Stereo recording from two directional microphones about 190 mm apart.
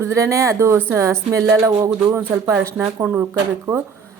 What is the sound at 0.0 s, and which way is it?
A woman's voice, 15° right (ahead or behind).